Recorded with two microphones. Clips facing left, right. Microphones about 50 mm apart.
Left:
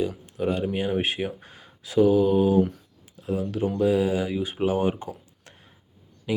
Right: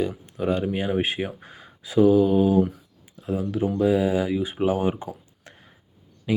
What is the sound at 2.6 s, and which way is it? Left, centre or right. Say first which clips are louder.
Speech: right 1 dB; centre.